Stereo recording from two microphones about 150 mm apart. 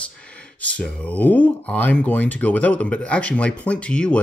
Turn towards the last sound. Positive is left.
turn(degrees=5)  # may be behind; listen again after turning